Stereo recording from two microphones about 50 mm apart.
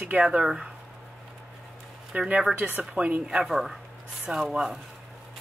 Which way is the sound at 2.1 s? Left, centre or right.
Right.